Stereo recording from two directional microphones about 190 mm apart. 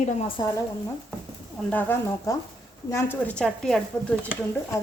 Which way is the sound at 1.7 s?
10° left (ahead or behind).